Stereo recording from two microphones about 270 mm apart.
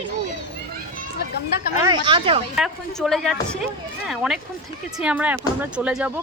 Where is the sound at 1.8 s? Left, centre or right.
Centre.